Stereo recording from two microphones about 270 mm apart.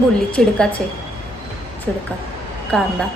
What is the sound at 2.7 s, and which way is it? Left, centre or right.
Speech, centre.